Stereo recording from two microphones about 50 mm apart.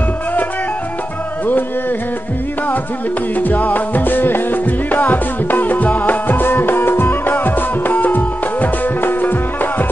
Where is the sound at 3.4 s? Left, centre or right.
Left.